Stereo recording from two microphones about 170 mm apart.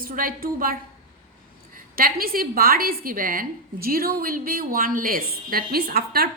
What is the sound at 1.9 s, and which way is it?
A woman's voice, 60° right (ahead or behind).